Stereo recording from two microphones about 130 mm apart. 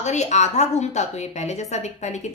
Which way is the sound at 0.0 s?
65° left (ahead or behind).